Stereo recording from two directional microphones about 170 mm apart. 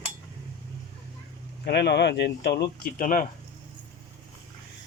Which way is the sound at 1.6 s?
75° left (ahead or behind).